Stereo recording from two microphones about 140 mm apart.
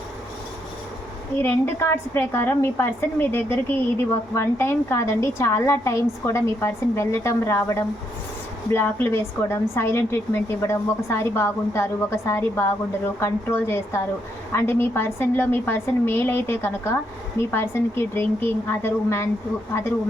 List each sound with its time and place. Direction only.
1.4 s a woman's voice: 15° left (ahead or behind)